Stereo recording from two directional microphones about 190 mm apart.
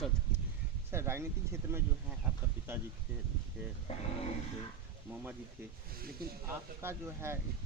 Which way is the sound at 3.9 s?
30° left (ahead or behind).